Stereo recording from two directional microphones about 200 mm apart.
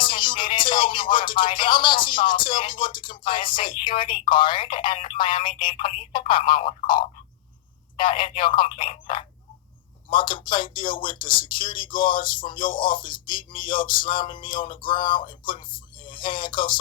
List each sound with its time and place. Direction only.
0.0 s speech: 25° left (ahead or behind)